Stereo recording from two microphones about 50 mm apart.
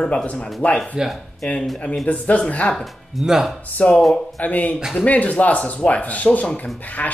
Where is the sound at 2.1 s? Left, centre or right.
Left.